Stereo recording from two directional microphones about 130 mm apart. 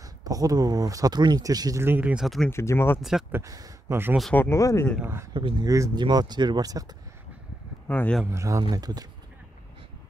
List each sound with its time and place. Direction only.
0.2 s speech: 25° right (ahead or behind)
2.2 s speech: centre (ahead or behind)
2.5 s speech: 20° left (ahead or behind)
3.0 s speech: 5° right (ahead or behind)
3.3 s speech: 15° right (ahead or behind)
4.4 s speech: 25° left (ahead or behind)
5.3 s speech: 35° right (ahead or behind)
7.9 s speech: 15° left (ahead or behind)
8.3 s speech: 25° right (ahead or behind)